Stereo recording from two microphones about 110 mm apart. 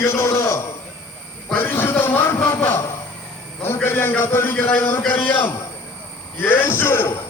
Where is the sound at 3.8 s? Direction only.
20° left (ahead or behind).